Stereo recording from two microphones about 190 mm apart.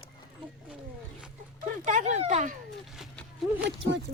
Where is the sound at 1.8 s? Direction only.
40° right (ahead or behind).